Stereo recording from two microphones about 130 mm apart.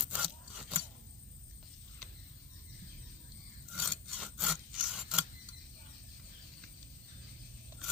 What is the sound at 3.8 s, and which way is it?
Rub, centre (ahead or behind).